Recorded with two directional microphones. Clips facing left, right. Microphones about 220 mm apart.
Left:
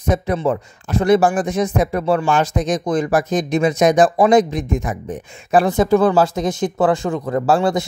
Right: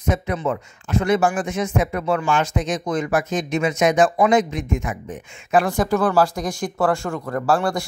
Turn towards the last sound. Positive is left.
turn(degrees=20)  # may be behind; listen again after turning